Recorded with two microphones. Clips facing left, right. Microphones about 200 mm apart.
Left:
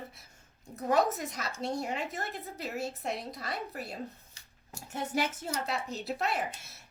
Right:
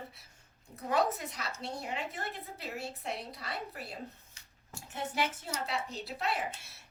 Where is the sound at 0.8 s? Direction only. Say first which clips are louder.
Left 3 dB; 45° left (ahead or behind).